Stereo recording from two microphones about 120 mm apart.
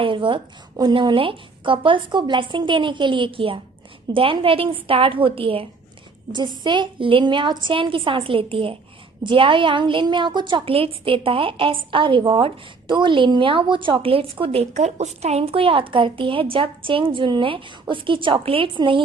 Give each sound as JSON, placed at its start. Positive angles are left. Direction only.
{"t": 0.0, "sound": "a woman's voice", "side_deg": -45}